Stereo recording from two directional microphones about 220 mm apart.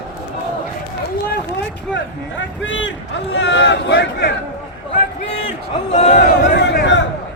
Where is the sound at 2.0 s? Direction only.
60° left (ahead or behind).